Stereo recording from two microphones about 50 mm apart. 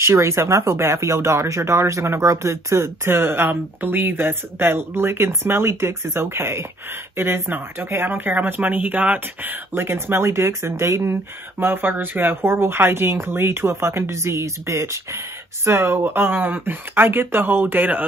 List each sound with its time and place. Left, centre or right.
0.0 s speech: right
7.2 s speech: right
11.6 s speech: right
15.6 s speech: right